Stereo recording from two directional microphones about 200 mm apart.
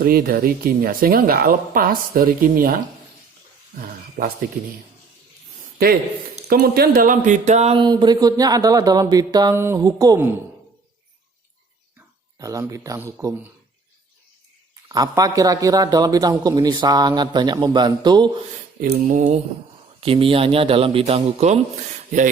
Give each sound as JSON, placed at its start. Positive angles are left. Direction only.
{"t": 0.0, "sound": "speech", "side_deg": -50}
{"t": 6.5, "sound": "speech", "side_deg": -50}
{"t": 11.9, "sound": "speech", "side_deg": -15}
{"t": 14.8, "sound": "speech", "side_deg": -20}
{"t": 18.8, "sound": "mantra", "side_deg": -40}
{"t": 20.0, "sound": "speech", "side_deg": -25}